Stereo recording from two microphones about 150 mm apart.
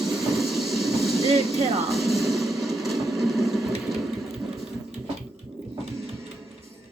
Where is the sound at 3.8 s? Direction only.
Centre (ahead or behind).